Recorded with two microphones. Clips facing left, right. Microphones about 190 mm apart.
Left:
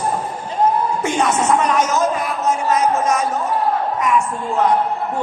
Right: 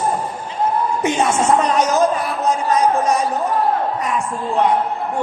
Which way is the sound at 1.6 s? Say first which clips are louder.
Right 2 dB; 35° right (ahead or behind).